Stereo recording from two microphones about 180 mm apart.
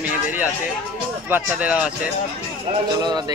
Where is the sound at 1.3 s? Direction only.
5° right (ahead or behind).